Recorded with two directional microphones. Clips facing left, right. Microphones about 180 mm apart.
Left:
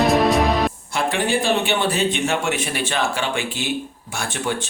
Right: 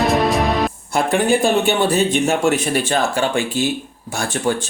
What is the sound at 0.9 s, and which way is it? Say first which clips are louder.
A man's voice: right 7 dB; 45° right (ahead or behind).